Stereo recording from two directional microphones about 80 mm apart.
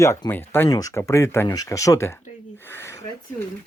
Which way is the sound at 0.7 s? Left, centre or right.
Left.